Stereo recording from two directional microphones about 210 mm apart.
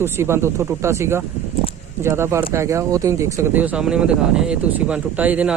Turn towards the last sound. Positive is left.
turn(degrees=-5)  # may be behind; listen again after turning